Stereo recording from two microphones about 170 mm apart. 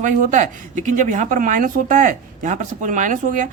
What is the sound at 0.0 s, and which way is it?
Speech, 50° right (ahead or behind).